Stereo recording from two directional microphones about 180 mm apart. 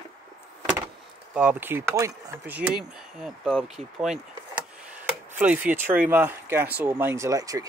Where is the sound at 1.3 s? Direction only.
10° right (ahead or behind).